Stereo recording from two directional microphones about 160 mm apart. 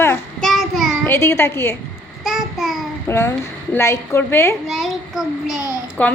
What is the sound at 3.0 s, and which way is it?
A child's voice, 15° left (ahead or behind).